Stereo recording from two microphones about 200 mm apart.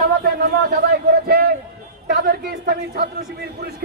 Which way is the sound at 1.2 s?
50° right (ahead or behind).